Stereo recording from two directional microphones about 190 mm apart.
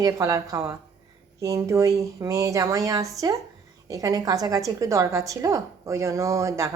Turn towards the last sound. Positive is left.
turn(degrees=-15)  # may be behind; listen again after turning